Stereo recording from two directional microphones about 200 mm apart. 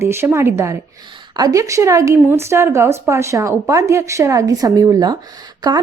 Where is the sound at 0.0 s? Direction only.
10° right (ahead or behind).